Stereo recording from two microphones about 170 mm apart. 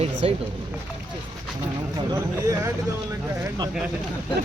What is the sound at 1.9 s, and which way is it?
Speech, 20° right (ahead or behind).